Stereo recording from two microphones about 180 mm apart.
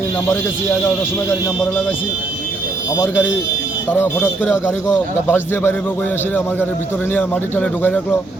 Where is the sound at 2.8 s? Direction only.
15° left (ahead or behind).